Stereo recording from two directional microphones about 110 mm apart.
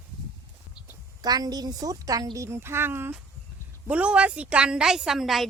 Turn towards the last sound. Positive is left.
turn(degrees=0)  # may be behind; listen again after turning